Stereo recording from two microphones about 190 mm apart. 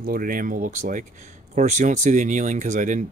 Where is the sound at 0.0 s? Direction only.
50° right (ahead or behind).